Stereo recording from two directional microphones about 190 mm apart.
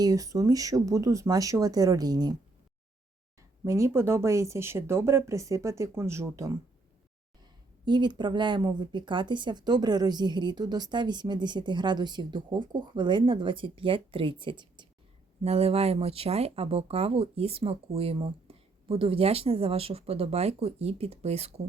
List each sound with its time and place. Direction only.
0.0 s a woman's voice: 20° right (ahead or behind)
3.6 s speech: 15° right (ahead or behind)
7.9 s a woman's voice: 25° right (ahead or behind)